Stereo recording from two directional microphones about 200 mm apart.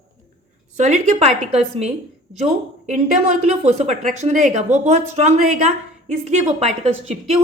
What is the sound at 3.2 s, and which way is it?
Speech, 30° right (ahead or behind).